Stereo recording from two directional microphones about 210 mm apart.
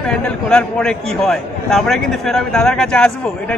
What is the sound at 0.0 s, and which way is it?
A man's voice, 5° left (ahead or behind).